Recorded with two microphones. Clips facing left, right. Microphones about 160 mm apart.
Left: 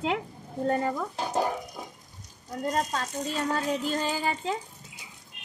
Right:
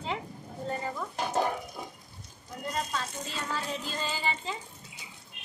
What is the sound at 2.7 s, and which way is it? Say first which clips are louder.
Speech: left 5 dB; 45° left (ahead or behind).